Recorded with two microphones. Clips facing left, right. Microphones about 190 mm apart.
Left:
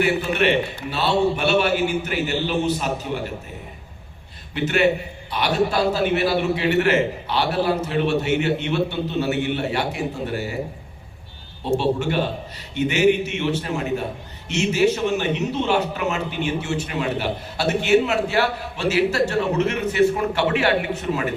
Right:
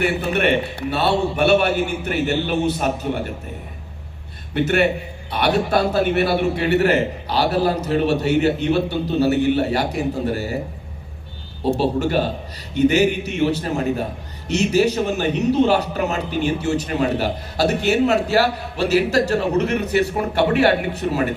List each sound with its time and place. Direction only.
0.3 s a man's voice: 55° right (ahead or behind)
4.5 s a man's voice: 50° right (ahead or behind)
11.8 s a man's voice: 40° right (ahead or behind)